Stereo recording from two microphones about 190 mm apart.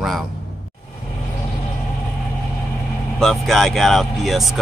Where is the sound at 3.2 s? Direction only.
Centre (ahead or behind).